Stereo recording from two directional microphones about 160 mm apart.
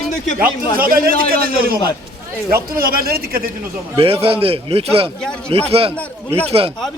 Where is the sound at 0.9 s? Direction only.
65° right (ahead or behind).